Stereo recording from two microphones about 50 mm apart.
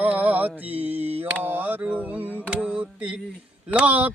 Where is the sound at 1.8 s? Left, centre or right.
Right.